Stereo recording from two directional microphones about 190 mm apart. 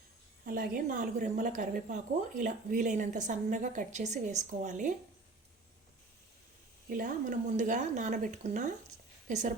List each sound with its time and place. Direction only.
0.4 s a woman's voice: 50° right (ahead or behind)
6.9 s a woman's voice: 45° right (ahead or behind)